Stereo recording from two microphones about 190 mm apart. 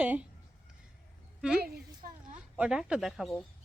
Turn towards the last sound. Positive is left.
turn(degrees=0)  # may be behind; listen again after turning